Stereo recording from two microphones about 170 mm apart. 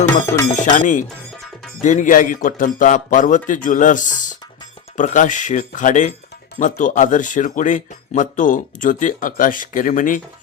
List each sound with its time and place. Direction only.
0.5 s speech: 50° left (ahead or behind)